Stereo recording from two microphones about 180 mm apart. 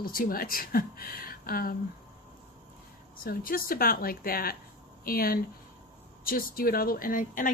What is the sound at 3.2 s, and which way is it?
Speech, 55° left (ahead or behind).